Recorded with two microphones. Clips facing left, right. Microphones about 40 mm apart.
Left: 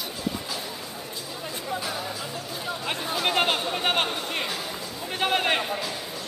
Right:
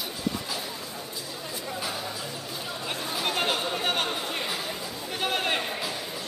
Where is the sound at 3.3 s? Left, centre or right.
Left.